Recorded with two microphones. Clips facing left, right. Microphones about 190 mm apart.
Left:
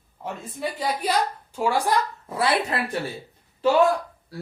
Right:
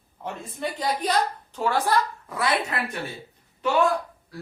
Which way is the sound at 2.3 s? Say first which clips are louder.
Left 3 dB; 30° left (ahead or behind).